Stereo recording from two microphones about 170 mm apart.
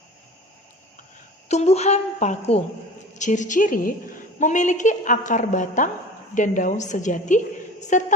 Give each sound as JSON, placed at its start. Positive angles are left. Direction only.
{"t": 1.5, "sound": "a woman's voice", "side_deg": 40}